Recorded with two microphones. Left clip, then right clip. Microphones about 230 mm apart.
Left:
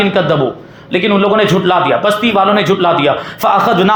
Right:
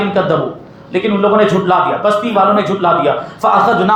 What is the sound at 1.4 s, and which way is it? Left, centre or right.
A man's voice, left.